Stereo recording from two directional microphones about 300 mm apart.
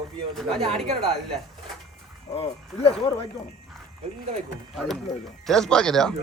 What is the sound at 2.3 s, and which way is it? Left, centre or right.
Speech, centre.